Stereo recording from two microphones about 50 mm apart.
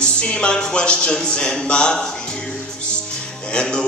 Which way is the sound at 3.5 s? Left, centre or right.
Centre.